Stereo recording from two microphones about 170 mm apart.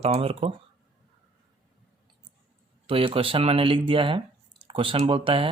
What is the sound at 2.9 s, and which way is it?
Speech, 35° right (ahead or behind).